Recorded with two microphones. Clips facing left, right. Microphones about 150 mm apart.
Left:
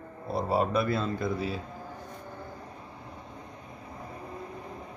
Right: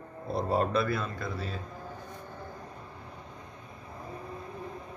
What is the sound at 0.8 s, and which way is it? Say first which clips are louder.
Speech: left 4 dB; 25° left (ahead or behind).